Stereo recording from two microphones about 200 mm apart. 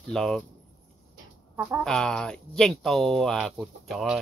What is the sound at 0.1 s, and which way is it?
Speech, centre (ahead or behind).